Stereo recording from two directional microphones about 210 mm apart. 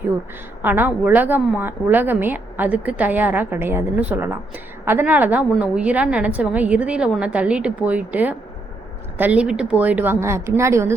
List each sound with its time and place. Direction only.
0.6 s a woman's voice: 10° right (ahead or behind)